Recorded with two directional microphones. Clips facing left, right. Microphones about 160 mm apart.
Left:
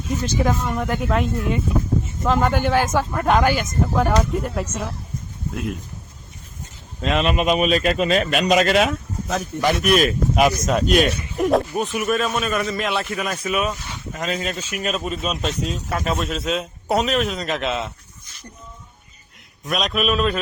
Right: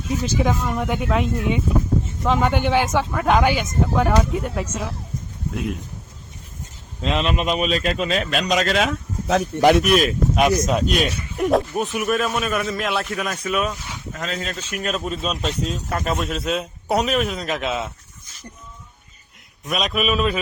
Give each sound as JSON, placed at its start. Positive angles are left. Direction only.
{"t": 0.1, "sound": "a man's voice", "side_deg": 0}
{"t": 7.2, "sound": "a man's voice", "side_deg": 5}
{"t": 9.2, "sound": "speech", "side_deg": -70}
{"t": 9.7, "sound": "a man's voice", "side_deg": 0}
{"t": 19.6, "sound": "a man's voice", "side_deg": 0}